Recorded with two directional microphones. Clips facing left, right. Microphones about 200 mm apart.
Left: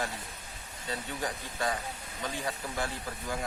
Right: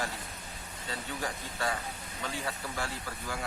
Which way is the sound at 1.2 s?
15° left (ahead or behind).